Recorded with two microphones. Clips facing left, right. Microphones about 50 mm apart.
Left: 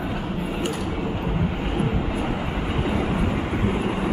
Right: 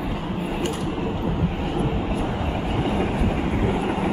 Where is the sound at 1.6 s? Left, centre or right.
Left.